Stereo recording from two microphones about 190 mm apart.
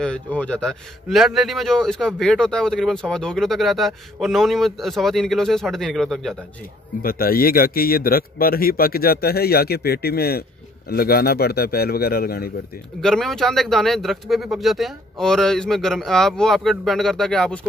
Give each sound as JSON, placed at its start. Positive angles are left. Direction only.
{"t": 0.0, "sound": "a man's voice", "side_deg": 5}
{"t": 7.0, "sound": "a man's voice", "side_deg": 50}
{"t": 13.0, "sound": "a man's voice", "side_deg": 0}